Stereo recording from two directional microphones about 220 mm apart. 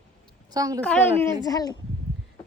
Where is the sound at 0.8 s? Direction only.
5° left (ahead or behind).